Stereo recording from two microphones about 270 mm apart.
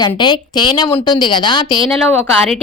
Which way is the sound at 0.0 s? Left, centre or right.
Centre.